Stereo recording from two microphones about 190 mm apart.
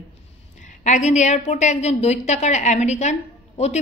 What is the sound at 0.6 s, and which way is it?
A woman's voice, 40° left (ahead or behind).